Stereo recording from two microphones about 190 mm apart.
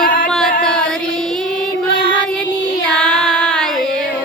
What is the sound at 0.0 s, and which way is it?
Music, 70° left (ahead or behind).